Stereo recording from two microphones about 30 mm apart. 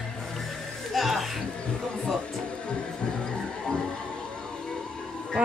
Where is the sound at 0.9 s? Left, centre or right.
Centre.